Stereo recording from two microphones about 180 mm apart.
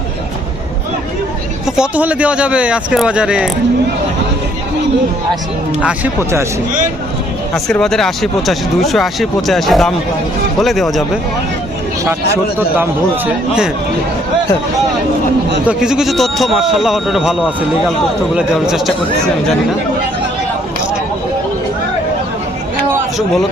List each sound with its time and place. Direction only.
1.6 s speech: 5° right (ahead or behind)
7.5 s speech: 5° left (ahead or behind)
12.8 s a man's voice: 10° right (ahead or behind)
15.6 s speech: 5° right (ahead or behind)